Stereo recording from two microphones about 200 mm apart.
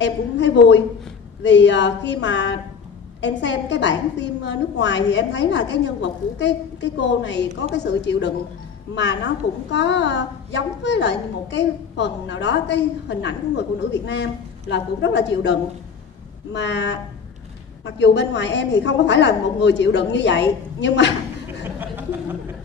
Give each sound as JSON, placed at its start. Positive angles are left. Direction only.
{"t": 0.0, "sound": "a woman's voice", "side_deg": 65}
{"t": 9.7, "sound": "a woman's voice", "side_deg": 60}
{"t": 16.5, "sound": "a woman's voice", "side_deg": 60}
{"t": 21.6, "sound": "a sound", "side_deg": -10}